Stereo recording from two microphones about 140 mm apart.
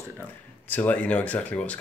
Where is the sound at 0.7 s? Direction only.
10° left (ahead or behind).